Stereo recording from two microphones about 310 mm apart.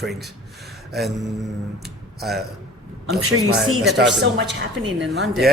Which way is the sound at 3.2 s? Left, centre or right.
Right.